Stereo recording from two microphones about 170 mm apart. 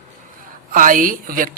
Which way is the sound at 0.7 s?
55° right (ahead or behind).